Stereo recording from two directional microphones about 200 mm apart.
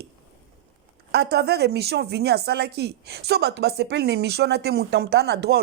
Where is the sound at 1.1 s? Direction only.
55° right (ahead or behind).